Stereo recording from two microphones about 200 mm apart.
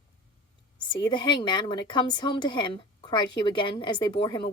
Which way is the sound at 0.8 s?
25° left (ahead or behind).